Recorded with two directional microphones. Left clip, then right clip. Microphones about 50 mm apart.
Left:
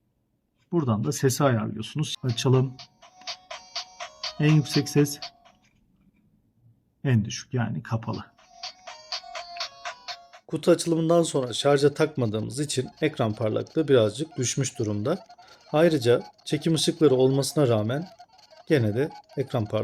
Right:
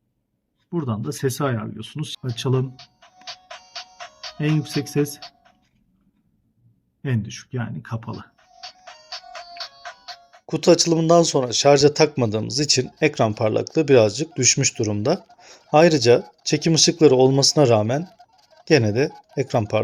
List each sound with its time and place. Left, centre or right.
0.7 s speech: left
2.3 s music: left
5.2 s music: left
7.0 s speech: left
8.1 s music: left
9.6 s music: centre
10.4 s speech: right
15.7 s speech: right
18.0 s a sound: centre
18.6 s speech: right